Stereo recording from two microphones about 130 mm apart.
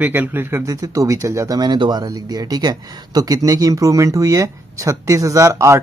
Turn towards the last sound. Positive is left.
turn(degrees=-20)  # may be behind; listen again after turning